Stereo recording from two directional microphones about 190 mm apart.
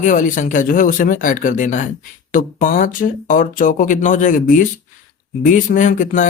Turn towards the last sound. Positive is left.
turn(degrees=40)  # may be behind; listen again after turning